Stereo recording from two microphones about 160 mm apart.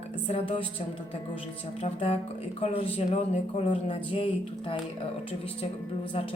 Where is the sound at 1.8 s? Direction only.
40° left (ahead or behind).